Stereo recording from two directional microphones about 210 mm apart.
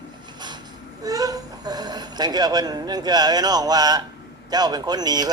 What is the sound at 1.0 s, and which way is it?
Speech, 15° right (ahead or behind).